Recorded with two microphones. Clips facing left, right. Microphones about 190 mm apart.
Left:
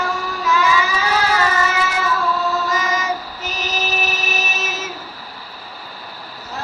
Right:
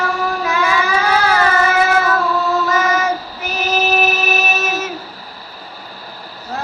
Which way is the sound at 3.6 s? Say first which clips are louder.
Right 8 dB; 60° right (ahead or behind).